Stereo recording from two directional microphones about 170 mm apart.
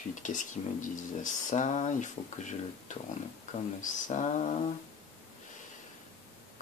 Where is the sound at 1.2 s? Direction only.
45° left (ahead or behind).